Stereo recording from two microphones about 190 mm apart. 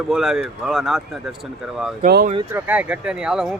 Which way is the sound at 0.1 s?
Centre (ahead or behind).